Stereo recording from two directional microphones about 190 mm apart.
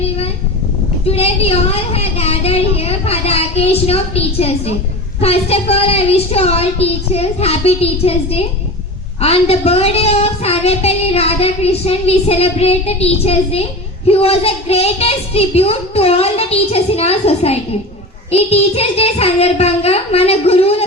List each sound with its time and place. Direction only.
1.0 s child singing: 30° left (ahead or behind)